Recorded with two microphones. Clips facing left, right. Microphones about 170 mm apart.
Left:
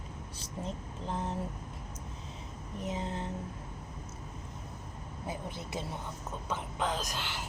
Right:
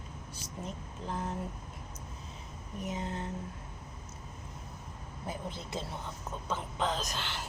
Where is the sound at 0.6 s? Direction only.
25° left (ahead or behind).